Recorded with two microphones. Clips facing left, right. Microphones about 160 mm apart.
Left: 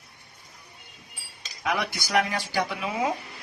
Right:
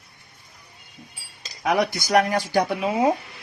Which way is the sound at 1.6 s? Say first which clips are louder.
Right 7 dB; 40° right (ahead or behind).